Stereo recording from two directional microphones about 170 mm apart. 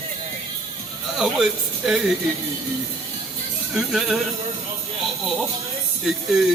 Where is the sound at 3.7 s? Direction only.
Centre (ahead or behind).